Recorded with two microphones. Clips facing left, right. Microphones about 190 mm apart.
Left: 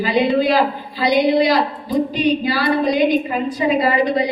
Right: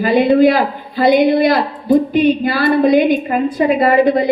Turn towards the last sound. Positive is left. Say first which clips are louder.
# right 5 dB
turn(degrees=-55)  # may be behind; listen again after turning